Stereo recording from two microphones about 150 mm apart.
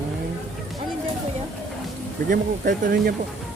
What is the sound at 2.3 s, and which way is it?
Speech, 70° right (ahead or behind).